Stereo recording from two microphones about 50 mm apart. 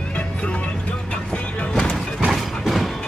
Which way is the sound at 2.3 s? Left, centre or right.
Centre.